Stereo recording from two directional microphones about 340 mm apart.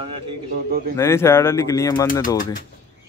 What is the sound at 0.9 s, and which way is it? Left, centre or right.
Speech, centre.